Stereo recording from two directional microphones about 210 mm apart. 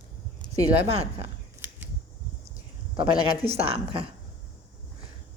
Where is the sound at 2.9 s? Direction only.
25° right (ahead or behind).